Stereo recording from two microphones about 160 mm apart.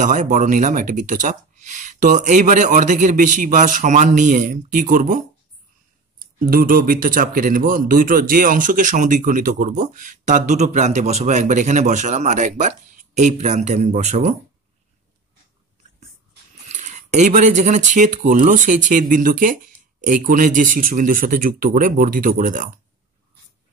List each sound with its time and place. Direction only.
0.0 s speech: 50° right (ahead or behind)
16.6 s speech: 45° right (ahead or behind)